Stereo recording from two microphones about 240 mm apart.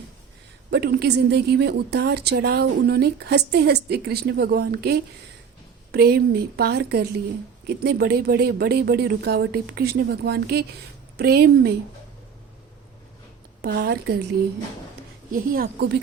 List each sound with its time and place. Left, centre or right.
0.7 s a woman's voice: right
13.6 s speech: right
15.3 s speech: right